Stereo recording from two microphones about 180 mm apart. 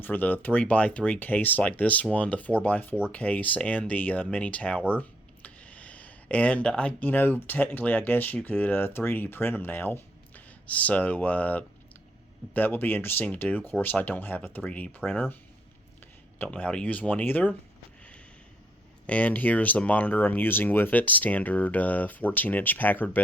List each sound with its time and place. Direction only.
0.0 s speech: 10° left (ahead or behind)
16.4 s speech: 5° left (ahead or behind)
19.0 s speech: 10° left (ahead or behind)